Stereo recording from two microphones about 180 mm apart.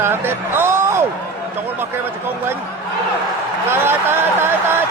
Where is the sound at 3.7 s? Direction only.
10° right (ahead or behind).